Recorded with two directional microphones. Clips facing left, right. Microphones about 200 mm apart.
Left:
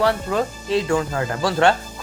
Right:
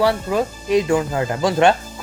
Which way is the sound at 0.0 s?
10° right (ahead or behind).